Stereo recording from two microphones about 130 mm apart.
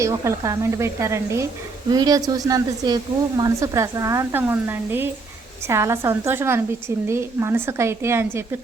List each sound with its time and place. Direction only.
0.0 s speech: 20° right (ahead or behind)